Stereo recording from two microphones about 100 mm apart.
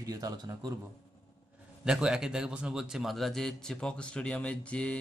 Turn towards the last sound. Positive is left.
turn(degrees=10)  # may be behind; listen again after turning